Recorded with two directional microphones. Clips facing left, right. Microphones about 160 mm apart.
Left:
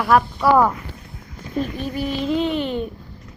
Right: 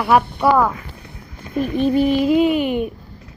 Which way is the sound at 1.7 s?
25° right (ahead or behind).